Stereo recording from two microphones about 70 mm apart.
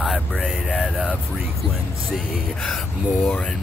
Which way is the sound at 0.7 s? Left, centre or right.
Centre.